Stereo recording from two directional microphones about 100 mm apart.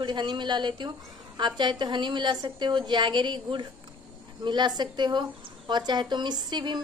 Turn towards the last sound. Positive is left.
turn(degrees=-50)  # may be behind; listen again after turning